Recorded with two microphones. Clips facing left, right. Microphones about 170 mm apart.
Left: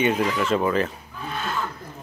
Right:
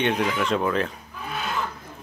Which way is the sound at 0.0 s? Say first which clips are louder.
Left 2 dB; centre (ahead or behind).